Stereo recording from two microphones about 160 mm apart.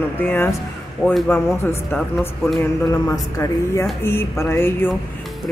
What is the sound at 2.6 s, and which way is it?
Speech, 20° left (ahead or behind).